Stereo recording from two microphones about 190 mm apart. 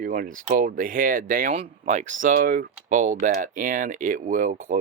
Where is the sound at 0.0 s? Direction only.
45° right (ahead or behind).